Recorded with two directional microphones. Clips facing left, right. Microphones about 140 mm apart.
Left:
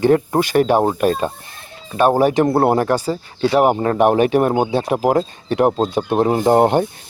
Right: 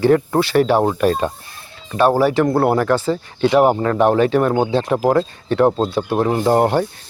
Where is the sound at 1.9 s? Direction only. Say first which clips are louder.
Even; 20° left (ahead or behind).